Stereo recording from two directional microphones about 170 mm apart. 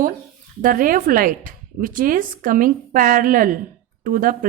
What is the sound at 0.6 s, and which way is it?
A woman's voice, 55° right (ahead or behind).